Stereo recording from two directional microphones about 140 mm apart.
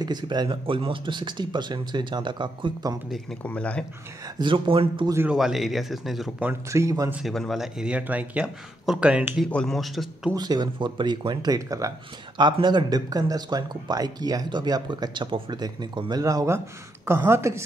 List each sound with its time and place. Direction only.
0.0 s speech: 30° right (ahead or behind)
3.1 s speech: 5° left (ahead or behind)
4.4 s speech: 35° right (ahead or behind)
5.3 s speech: centre (ahead or behind)
6.4 s speech: 20° right (ahead or behind)
7.1 s speech: 5° right (ahead or behind)
9.5 s speech: 5° left (ahead or behind)
10.3 s speech: 30° right (ahead or behind)